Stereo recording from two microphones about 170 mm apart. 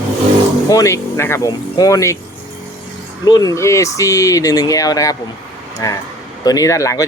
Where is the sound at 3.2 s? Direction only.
25° left (ahead or behind).